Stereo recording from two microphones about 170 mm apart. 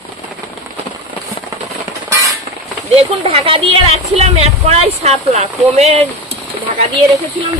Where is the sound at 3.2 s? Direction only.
35° right (ahead or behind).